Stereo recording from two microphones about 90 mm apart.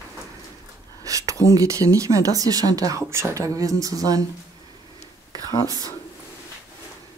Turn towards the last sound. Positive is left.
turn(degrees=-45)  # may be behind; listen again after turning